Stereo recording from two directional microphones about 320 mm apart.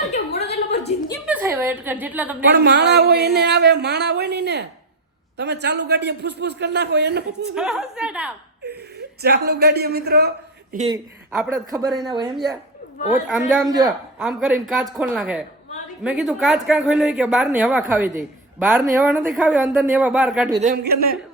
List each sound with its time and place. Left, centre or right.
0.1 s a sound: left
1.2 s a sound: centre
2.5 s speech: right
7.5 s speech: centre
9.2 s a man's voice: right
10.9 s speech: centre
13.2 s speech: centre
20.6 s a man's voice: right